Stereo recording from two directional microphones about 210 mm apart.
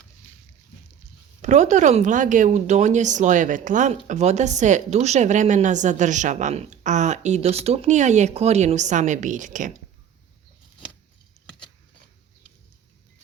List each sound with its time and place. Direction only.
1.4 s speech: 35° right (ahead or behind)